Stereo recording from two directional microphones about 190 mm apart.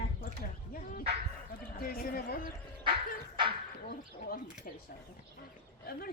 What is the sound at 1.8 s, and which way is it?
Speech, 50° left (ahead or behind).